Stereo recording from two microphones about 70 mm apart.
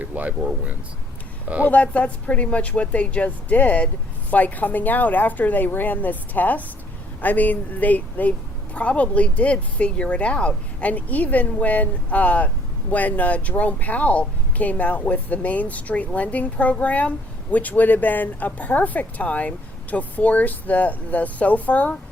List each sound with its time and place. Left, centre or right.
0.0 s speech: right
1.7 s speech: centre